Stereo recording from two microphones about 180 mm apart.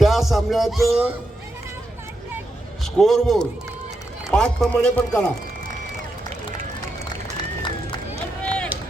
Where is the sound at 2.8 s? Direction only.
Centre (ahead or behind).